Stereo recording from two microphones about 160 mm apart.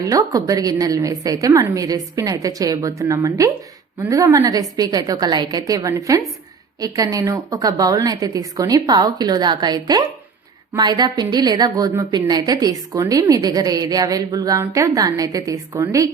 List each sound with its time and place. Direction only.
0.0 s a woman's voice: 20° right (ahead or behind)